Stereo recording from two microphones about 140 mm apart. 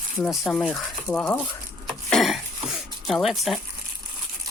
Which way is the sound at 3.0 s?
Centre (ahead or behind).